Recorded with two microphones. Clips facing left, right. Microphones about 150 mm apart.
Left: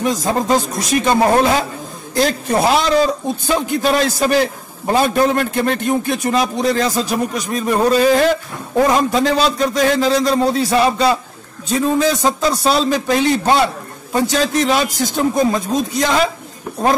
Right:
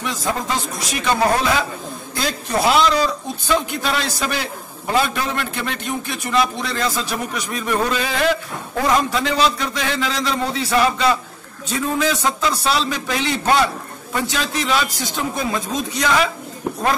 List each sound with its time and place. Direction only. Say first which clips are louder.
0.0 s a man's voice: left 6 dB; 40° left (ahead or behind)